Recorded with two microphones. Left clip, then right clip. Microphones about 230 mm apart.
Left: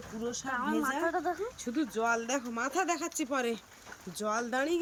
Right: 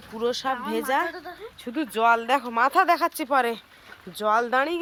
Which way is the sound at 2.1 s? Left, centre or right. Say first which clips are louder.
Right 10 dB; right.